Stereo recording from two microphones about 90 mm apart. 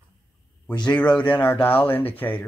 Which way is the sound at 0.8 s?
15° left (ahead or behind).